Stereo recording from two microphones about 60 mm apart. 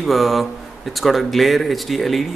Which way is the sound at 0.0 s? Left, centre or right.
Centre.